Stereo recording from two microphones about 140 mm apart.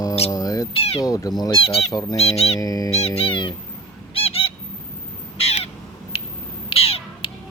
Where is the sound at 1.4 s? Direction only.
40° left (ahead or behind).